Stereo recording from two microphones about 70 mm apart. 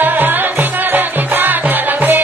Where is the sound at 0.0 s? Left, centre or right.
Right.